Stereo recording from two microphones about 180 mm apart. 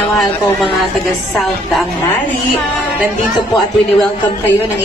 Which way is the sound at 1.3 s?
Centre (ahead or behind).